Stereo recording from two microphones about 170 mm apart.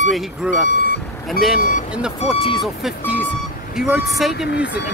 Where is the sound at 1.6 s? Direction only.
50° left (ahead or behind).